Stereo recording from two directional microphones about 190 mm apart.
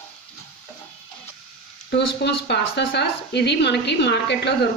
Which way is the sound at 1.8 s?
65° left (ahead or behind).